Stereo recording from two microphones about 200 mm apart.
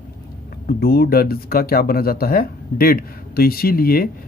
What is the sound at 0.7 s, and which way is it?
Speech, 50° left (ahead or behind).